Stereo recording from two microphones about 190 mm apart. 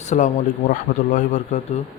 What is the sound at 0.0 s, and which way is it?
Speech, 40° left (ahead or behind).